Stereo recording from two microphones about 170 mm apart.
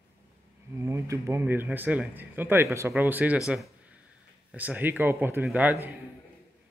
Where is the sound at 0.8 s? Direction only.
15° right (ahead or behind).